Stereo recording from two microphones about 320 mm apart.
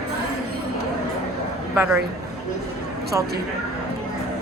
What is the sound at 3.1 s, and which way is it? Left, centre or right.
Speech, centre.